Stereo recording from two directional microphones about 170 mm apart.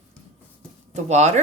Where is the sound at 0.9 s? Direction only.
40° right (ahead or behind).